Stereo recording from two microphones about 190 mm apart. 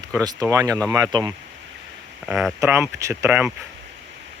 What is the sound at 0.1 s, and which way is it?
Speech, 20° right (ahead or behind).